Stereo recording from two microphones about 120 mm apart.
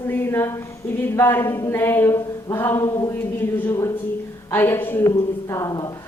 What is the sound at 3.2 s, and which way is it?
A woman's voice, 15° left (ahead or behind).